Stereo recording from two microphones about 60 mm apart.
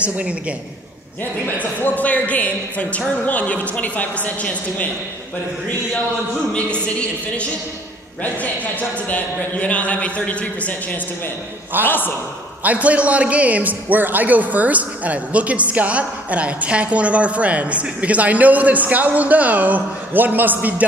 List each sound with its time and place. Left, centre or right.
0.0 s a man's voice: right
1.6 s a man's voice: left
6.5 s a man's voice: left
9.1 s a man's voice: left
12.6 s a man's voice: right